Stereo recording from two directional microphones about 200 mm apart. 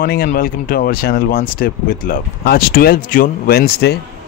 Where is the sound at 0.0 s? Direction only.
50° left (ahead or behind).